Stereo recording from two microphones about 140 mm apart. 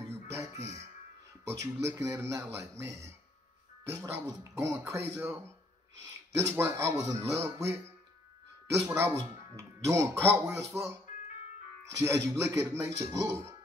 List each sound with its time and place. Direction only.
0.0 s music: 20° right (ahead or behind)
1.6 s speech: 20° right (ahead or behind)
12.0 s speech: 20° right (ahead or behind)